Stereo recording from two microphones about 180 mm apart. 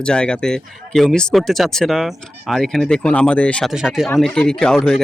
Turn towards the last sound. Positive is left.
turn(degrees=5)  # may be behind; listen again after turning